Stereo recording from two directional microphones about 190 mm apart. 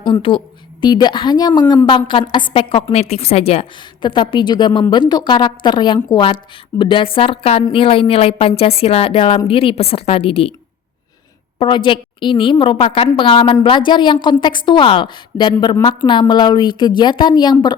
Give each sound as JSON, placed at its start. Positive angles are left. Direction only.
{"t": 0.1, "sound": "a woman's voice", "side_deg": 25}
{"t": 11.6, "sound": "a woman's voice", "side_deg": 25}